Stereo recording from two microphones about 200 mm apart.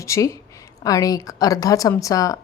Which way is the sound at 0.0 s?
15° left (ahead or behind).